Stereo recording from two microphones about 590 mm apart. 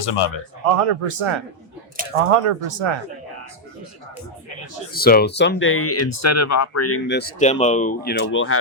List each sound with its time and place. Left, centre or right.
0.0 s speech: left
0.6 s a man's voice: right
4.9 s speech: centre